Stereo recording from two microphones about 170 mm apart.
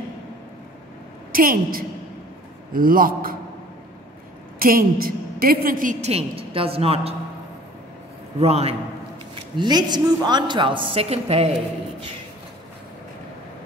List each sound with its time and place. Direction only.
1.3 s a man's voice: 55° right (ahead or behind)
4.6 s a woman's voice: 60° right (ahead or behind); by 7.2 s 35° right (ahead or behind)
8.4 s a man's voice: 35° right (ahead or behind)
9.3 s a woman's voice: 25° right (ahead or behind)